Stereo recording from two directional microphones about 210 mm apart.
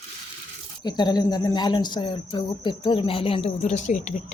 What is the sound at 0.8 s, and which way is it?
A woman's voice, 20° left (ahead or behind).